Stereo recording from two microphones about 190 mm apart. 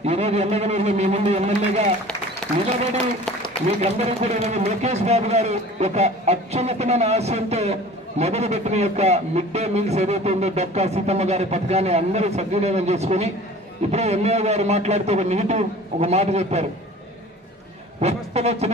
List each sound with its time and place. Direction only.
0.0 s a man's voice: 35° right (ahead or behind)
2.4 s a sound: 5° left (ahead or behind)
3.8 s a man's voice: 35° right (ahead or behind)
18.0 s a man's voice: 35° right (ahead or behind)